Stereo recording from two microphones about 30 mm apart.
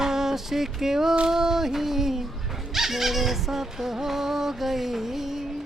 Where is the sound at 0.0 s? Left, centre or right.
Centre.